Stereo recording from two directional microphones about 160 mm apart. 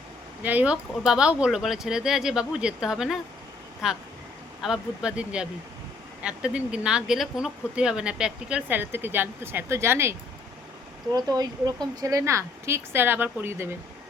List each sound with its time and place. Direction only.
0.4 s speech: 10° right (ahead or behind)